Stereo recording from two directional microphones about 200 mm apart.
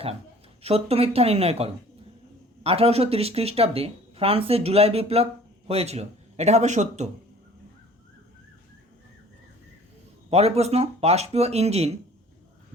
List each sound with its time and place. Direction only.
0.6 s speech: 30° right (ahead or behind)
10.2 s speech: 30° right (ahead or behind)